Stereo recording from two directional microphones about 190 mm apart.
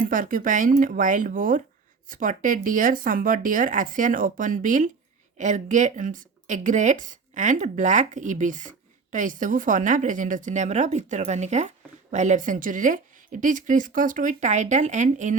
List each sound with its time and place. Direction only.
0.0 s a woman's voice: 45° right (ahead or behind)